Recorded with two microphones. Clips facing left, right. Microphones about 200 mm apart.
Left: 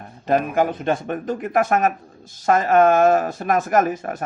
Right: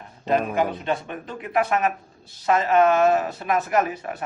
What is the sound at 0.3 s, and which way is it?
Speech, 50° left (ahead or behind).